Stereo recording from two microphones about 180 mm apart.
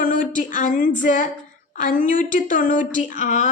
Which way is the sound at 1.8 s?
45° left (ahead or behind).